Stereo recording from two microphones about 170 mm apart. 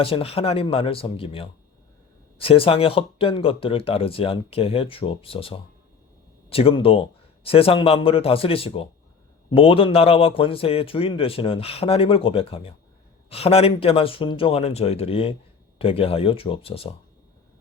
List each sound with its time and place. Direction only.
0.0 s a man's voice: 35° left (ahead or behind)